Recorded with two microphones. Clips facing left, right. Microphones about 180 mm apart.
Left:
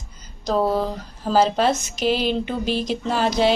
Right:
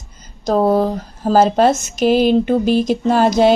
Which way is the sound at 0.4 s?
45° right (ahead or behind).